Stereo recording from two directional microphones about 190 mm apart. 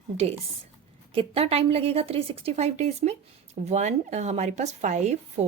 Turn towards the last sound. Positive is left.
turn(degrees=-35)  # may be behind; listen again after turning